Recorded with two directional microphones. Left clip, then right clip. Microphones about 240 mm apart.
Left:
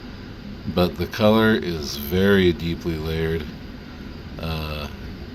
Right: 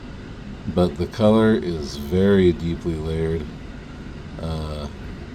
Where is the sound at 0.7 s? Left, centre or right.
Centre.